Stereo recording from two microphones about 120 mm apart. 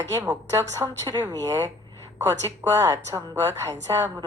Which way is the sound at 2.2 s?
20° right (ahead or behind).